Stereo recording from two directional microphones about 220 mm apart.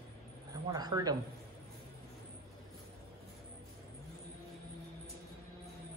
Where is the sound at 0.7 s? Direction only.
15° right (ahead or behind).